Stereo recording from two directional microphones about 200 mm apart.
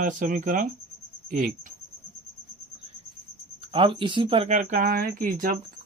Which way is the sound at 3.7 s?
25° right (ahead or behind).